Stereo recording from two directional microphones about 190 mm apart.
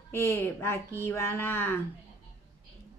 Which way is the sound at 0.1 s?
10° left (ahead or behind).